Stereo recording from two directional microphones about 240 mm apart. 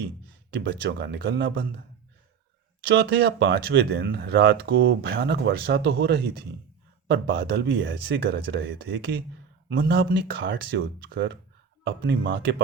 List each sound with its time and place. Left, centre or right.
0.5 s speech: right
2.8 s speech: right